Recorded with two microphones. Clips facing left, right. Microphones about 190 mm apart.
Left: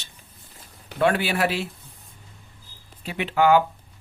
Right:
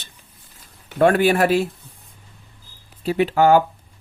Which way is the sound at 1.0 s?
50° right (ahead or behind).